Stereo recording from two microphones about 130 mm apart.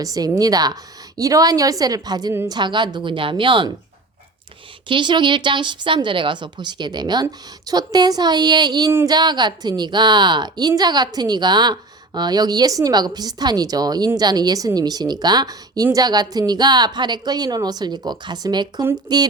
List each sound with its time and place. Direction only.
0.0 s a woman's voice: 30° right (ahead or behind)
4.9 s a woman's voice: 35° right (ahead or behind)